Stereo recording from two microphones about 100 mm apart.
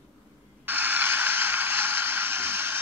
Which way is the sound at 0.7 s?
20° right (ahead or behind).